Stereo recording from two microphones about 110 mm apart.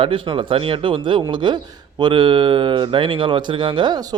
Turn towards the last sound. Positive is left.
turn(degrees=-45)  # may be behind; listen again after turning